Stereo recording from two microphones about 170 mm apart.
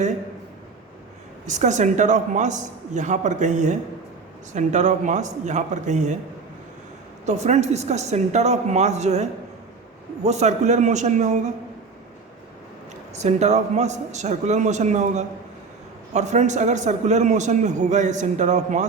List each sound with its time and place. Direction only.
1.5 s a man's voice: 45° right (ahead or behind)
7.3 s a woman's voice: 40° right (ahead or behind)
13.1 s a man's voice: 40° right (ahead or behind)